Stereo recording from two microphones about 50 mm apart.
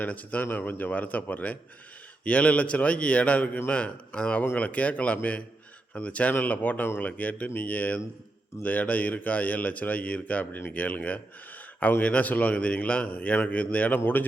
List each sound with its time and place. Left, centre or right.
0.0 s a man's voice: left
14.0 s speech: left